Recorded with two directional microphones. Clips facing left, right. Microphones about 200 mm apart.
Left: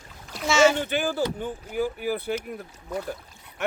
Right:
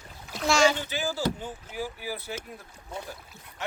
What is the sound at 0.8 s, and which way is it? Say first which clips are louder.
Speech: left 5 dB; 60° left (ahead or behind).